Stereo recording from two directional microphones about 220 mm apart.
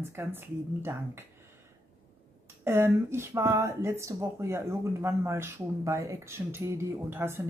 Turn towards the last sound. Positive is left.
turn(degrees=-10)  # may be behind; listen again after turning